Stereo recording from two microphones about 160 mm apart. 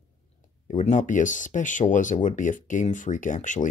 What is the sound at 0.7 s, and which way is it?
Speech, 50° left (ahead or behind).